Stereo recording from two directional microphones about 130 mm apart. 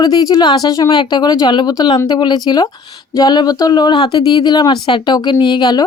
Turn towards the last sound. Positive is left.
turn(degrees=35)  # may be behind; listen again after turning